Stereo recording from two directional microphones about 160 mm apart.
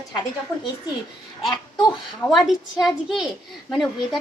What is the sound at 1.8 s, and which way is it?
A woman's voice, centre (ahead or behind).